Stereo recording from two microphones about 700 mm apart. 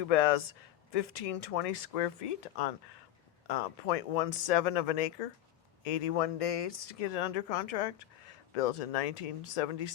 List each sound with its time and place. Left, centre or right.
0.1 s speech: left